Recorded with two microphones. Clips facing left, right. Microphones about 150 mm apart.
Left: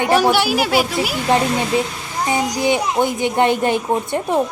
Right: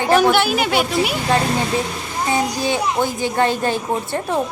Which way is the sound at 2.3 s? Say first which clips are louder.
Left 2 dB; 20° left (ahead or behind).